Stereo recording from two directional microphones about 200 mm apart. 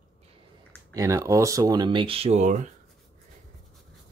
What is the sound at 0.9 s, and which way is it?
Speech, 15° right (ahead or behind).